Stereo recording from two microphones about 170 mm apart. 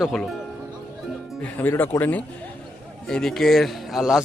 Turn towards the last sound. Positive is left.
turn(degrees=-5)  # may be behind; listen again after turning